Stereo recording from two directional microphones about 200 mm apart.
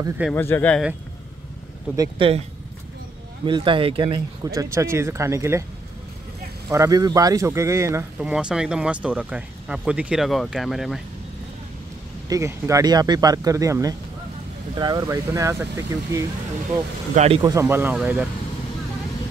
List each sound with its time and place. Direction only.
0.3 s speech: 10° left (ahead or behind)
2.0 s speech: 25° right (ahead or behind)
3.4 s speech: 25° right (ahead or behind)
6.7 s speech: 15° right (ahead or behind); by 11.0 s centre (ahead or behind)
12.3 s speech: 15° right (ahead or behind)
17.1 s speech: 35° right (ahead or behind)
17.4 s speech: 15° right (ahead or behind)